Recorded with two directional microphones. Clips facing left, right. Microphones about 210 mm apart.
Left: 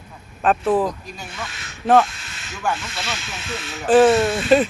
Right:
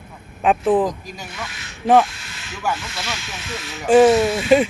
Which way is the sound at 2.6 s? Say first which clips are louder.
Even; 10° right (ahead or behind).